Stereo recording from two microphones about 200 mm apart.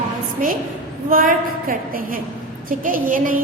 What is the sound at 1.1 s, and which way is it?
A woman's voice, 45° right (ahead or behind).